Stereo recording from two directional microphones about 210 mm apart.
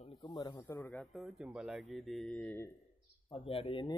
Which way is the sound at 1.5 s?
Centre (ahead or behind).